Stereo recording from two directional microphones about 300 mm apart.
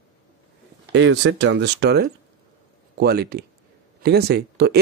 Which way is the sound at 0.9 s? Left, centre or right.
Right.